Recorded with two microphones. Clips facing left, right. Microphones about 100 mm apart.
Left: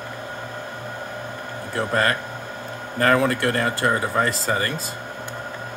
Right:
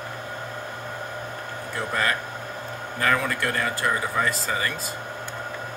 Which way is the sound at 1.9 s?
50° left (ahead or behind).